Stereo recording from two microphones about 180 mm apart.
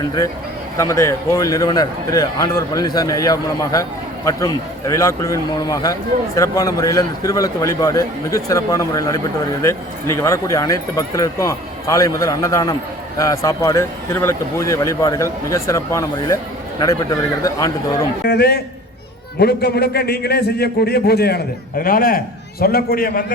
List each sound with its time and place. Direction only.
0.0 s a man's voice: 25° left (ahead or behind)
18.3 s a man's voice: 60° left (ahead or behind)